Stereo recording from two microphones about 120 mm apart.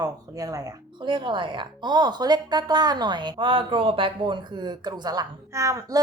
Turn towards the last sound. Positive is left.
turn(degrees=-25)  # may be behind; listen again after turning